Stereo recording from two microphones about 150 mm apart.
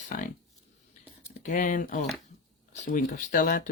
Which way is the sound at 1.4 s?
60° left (ahead or behind).